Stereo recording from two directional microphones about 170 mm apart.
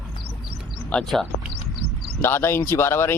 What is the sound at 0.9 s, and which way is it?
Speech, 5° left (ahead or behind).